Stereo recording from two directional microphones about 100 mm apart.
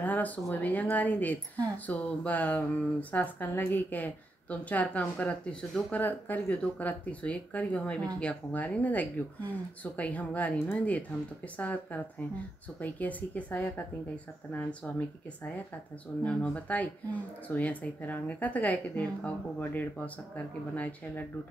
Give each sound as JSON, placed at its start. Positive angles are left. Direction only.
{"t": 0.0, "sound": "speech", "side_deg": 15}
{"t": 16.3, "sound": "speech", "side_deg": 10}